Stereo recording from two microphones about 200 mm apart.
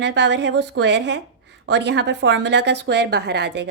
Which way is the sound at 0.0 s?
60° right (ahead or behind).